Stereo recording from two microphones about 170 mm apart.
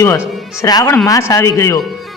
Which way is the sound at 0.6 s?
20° left (ahead or behind).